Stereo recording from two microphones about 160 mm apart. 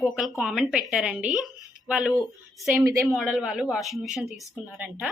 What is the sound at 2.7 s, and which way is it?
Speech, 15° right (ahead or behind).